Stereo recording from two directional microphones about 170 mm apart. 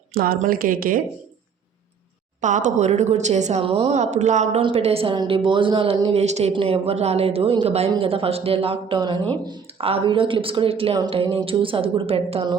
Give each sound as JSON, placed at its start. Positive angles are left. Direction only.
{"t": 0.1, "sound": "a woman's voice", "side_deg": -60}
{"t": 2.4, "sound": "a woman's voice", "side_deg": -45}